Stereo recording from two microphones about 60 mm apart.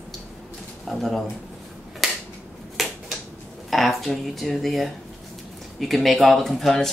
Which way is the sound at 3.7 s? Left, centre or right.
Centre.